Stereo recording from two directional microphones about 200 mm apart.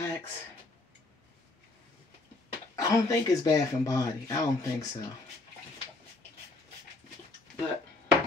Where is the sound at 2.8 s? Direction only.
15° left (ahead or behind).